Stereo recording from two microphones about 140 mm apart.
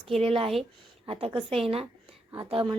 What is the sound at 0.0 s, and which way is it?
A woman's voice, 45° right (ahead or behind).